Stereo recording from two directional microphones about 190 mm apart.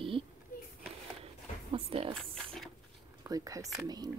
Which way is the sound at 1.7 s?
30° right (ahead or behind).